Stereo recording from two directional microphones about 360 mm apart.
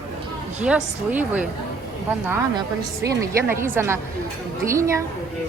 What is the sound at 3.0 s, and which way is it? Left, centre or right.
Speech, centre.